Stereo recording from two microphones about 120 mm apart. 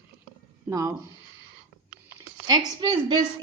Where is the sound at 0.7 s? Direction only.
25° right (ahead or behind).